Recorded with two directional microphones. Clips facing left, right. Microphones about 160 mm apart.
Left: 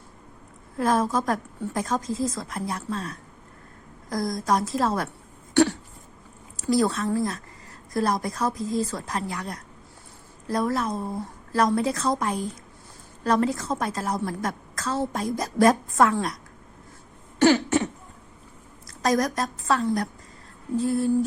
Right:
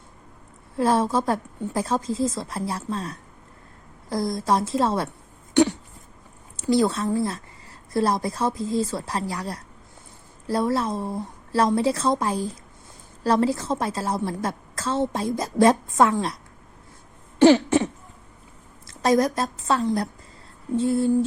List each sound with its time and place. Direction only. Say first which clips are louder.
0.8 s a woman's voice: right 2 dB; 30° right (ahead or behind)
6.6 s a woman's voice: right 2 dB; 25° right (ahead or behind)
17.4 s a woman's voice: right 4 dB; 25° right (ahead or behind)
18.9 s a woman's voice: right 3 dB; 25° right (ahead or behind)